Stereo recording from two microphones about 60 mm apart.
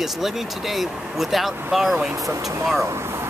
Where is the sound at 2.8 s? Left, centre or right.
Right.